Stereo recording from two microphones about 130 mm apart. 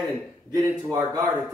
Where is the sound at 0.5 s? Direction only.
30° right (ahead or behind).